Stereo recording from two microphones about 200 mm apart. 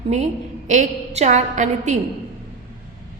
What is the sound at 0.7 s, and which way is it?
A woman's voice, 35° right (ahead or behind).